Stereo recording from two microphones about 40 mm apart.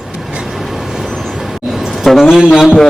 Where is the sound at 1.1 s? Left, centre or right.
Centre.